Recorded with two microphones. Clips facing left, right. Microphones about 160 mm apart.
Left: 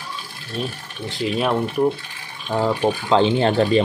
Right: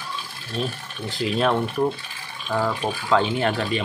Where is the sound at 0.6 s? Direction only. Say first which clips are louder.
Even; 5° left (ahead or behind).